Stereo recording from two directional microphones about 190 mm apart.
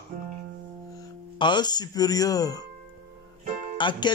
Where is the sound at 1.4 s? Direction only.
25° left (ahead or behind).